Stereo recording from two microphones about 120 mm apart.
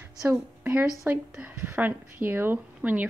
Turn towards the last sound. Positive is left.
turn(degrees=-15)  # may be behind; listen again after turning